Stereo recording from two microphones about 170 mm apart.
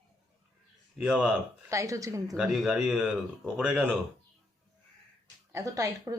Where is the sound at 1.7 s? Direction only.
20° right (ahead or behind).